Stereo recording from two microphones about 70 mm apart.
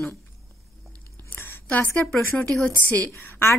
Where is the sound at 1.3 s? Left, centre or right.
Left.